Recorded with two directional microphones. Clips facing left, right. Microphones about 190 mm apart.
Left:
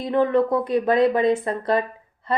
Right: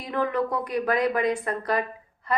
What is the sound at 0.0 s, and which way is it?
Speech, 25° left (ahead or behind).